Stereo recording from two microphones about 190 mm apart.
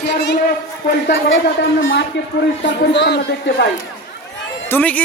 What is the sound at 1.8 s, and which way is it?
Speech, 85° left.